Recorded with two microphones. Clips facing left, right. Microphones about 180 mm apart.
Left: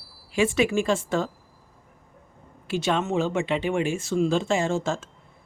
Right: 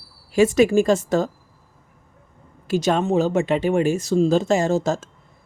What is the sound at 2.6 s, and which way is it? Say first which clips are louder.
Speech: right 5 dB; 40° right (ahead or behind).